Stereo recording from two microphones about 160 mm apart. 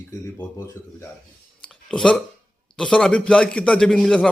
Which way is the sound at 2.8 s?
5° left (ahead or behind).